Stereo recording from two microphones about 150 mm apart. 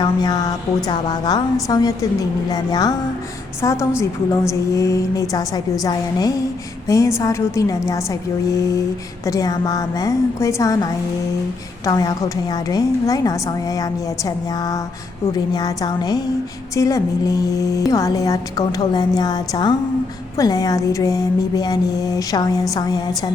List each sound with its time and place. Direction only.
0.0 s a woman's voice: 25° left (ahead or behind)
11.9 s a woman's voice: 25° left (ahead or behind)
15.5 s a woman's voice: 25° left (ahead or behind)